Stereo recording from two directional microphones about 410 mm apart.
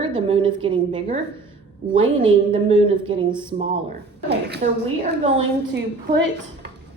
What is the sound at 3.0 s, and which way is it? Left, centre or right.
Speech, centre.